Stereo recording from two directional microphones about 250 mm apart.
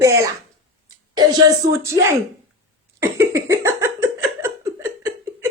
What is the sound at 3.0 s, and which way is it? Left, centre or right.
Cough, centre.